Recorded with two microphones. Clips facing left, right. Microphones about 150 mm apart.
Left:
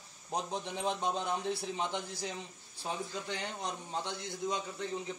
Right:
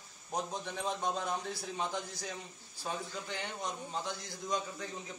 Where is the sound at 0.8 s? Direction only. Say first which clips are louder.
Left 1 dB; 25° left (ahead or behind).